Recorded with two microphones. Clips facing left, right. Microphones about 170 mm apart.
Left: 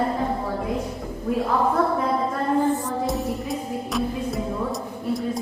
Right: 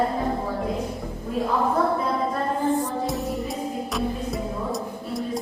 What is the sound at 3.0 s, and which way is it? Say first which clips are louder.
Music: left 1 dB; centre (ahead or behind).